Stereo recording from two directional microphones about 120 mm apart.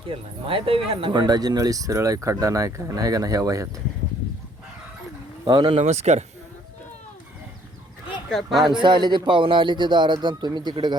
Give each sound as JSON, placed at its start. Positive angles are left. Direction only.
{"t": 0.1, "sound": "speech", "side_deg": -45}
{"t": 5.5, "sound": "speech", "side_deg": -45}
{"t": 5.8, "sound": "speech", "side_deg": -65}
{"t": 8.3, "sound": "speech", "side_deg": 0}
{"t": 8.8, "sound": "speech", "side_deg": -40}